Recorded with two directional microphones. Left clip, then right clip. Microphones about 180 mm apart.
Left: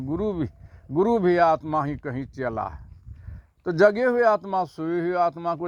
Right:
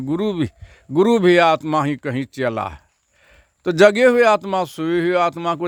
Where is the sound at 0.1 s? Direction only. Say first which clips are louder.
Right 5 dB; 30° right (ahead or behind).